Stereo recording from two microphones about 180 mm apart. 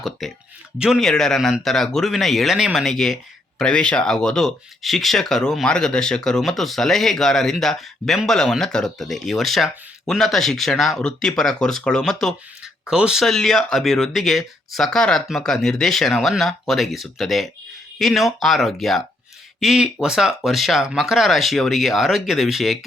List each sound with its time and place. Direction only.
0.2 s speech: centre (ahead or behind)